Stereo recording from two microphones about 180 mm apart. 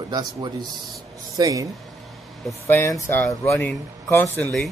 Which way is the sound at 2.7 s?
15° left (ahead or behind).